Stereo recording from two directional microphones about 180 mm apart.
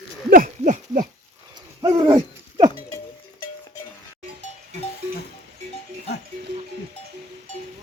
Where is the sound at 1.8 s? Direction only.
25° right (ahead or behind).